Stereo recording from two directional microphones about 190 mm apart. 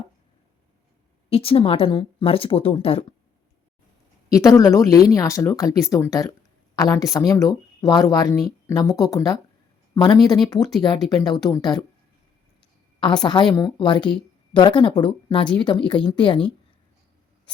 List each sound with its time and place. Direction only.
1.3 s speech: 30° left (ahead or behind)
4.3 s speech: 15° left (ahead or behind)
13.5 s speech: 25° left (ahead or behind)